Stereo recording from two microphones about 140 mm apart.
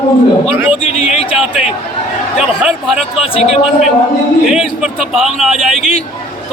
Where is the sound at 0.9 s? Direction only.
50° left (ahead or behind).